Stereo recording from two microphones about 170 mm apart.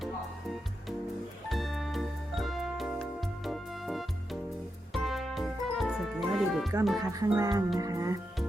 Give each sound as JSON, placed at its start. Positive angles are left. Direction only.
{"t": 1.5, "sound": "music", "side_deg": 0}
{"t": 7.0, "sound": "speech", "side_deg": -20}